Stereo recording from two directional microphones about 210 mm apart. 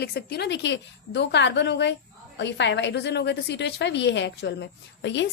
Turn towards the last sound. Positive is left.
turn(degrees=55)  # may be behind; listen again after turning